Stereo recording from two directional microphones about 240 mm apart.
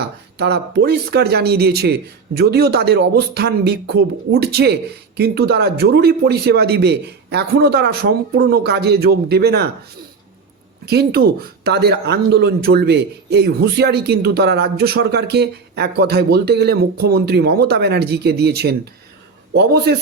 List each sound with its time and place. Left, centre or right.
0.0 s speech: right
10.8 s speech: right